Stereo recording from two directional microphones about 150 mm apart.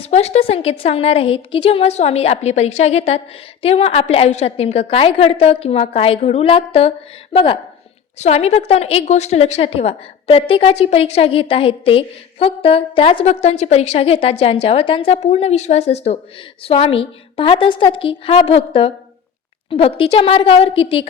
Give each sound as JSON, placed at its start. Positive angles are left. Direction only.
{"t": 0.1, "sound": "a woman's voice", "side_deg": 45}